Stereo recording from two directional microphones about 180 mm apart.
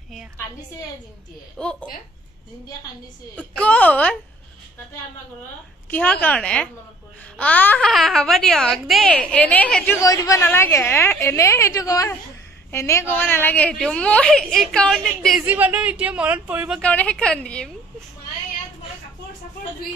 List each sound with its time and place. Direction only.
1.6 s speech: 5° left (ahead or behind)
3.5 s a woman's voice: 5° left (ahead or behind)
5.9 s a woman's voice: 10° left (ahead or behind)
9.9 s a woman's voice: 20° left (ahead or behind); by 15.4 s 5° left (ahead or behind)
15.4 s speech: 10° right (ahead or behind)
16.8 s a woman's voice: 5° left (ahead or behind)